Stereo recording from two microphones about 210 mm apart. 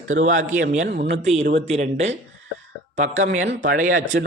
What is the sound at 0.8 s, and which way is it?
Speech, 50° right (ahead or behind).